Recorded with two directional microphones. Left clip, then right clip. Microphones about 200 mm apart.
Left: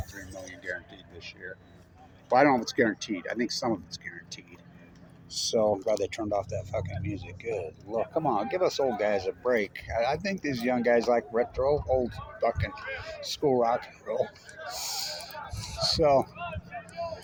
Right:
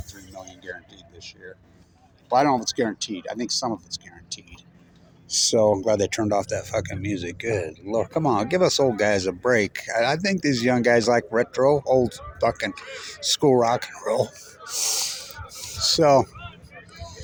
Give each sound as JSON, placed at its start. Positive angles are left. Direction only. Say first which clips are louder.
{"t": 1.2, "sound": "speech", "louder": "even", "side_deg": -25}
{"t": 5.5, "sound": "speech", "louder": "right 5 dB", "side_deg": -50}
{"t": 15.5, "sound": "speech", "louder": "right 6 dB", "side_deg": -45}